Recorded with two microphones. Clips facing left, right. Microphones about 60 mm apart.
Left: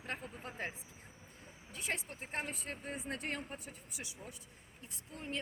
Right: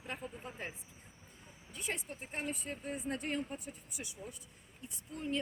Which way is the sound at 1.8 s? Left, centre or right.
Left.